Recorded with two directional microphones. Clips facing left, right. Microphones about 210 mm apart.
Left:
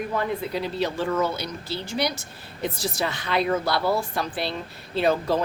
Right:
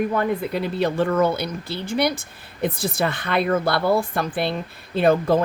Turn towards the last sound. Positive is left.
turn(degrees=-55)  # may be behind; listen again after turning